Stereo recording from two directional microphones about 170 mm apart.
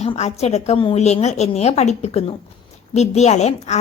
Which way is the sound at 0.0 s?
40° left (ahead or behind).